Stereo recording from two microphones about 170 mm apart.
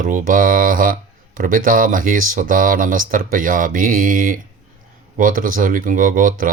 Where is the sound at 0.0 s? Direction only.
50° right (ahead or behind).